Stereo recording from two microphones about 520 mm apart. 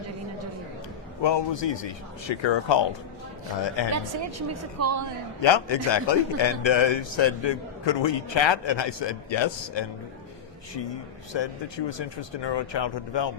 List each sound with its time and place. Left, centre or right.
1.2 s a man's voice: left
3.9 s a woman's voice: right
5.4 s a man's voice: left
11.3 s a man's voice: left